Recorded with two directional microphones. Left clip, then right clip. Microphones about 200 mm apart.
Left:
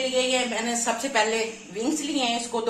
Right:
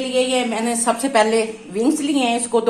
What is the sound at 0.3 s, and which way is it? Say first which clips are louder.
A woman's voice: right 5 dB; 55° right (ahead or behind).